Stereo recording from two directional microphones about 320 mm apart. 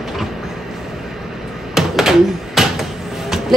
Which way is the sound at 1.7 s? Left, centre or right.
Centre.